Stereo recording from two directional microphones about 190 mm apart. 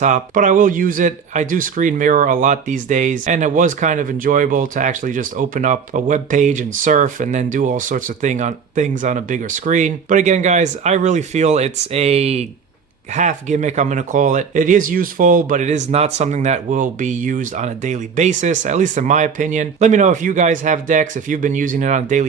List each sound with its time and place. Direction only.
0.0 s speech: 40° right (ahead or behind)